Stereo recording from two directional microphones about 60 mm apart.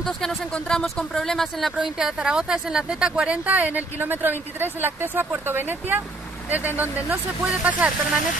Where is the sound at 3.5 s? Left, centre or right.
Right.